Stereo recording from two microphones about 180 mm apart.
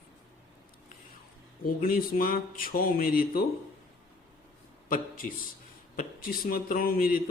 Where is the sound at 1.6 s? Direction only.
55° left (ahead or behind).